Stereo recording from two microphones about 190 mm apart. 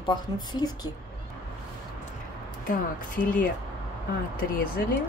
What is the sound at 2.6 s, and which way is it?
Speech, 45° left (ahead or behind).